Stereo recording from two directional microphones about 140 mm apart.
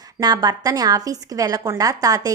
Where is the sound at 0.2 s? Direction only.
30° right (ahead or behind).